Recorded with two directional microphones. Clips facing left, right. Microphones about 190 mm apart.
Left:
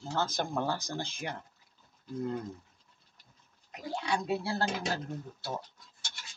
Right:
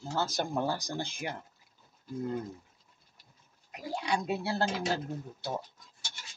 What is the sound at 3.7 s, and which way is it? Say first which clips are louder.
Speech: right 1 dB; 15° right (ahead or behind).